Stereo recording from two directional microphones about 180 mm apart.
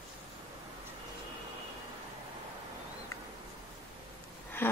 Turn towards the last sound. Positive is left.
turn(degrees=10)  # may be behind; listen again after turning